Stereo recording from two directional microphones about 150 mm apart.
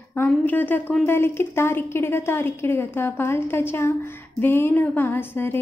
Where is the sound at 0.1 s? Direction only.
15° left (ahead or behind).